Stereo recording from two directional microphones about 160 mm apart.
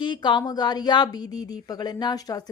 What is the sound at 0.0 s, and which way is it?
A woman's voice, 30° left (ahead or behind).